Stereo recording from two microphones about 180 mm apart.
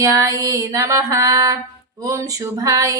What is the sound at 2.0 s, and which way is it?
Speech, 20° right (ahead or behind).